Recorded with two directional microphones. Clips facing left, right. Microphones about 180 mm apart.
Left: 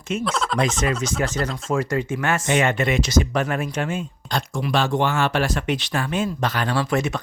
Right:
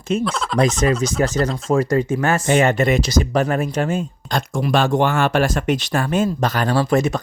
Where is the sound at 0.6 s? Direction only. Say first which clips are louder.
Right 8 dB; 40° right (ahead or behind).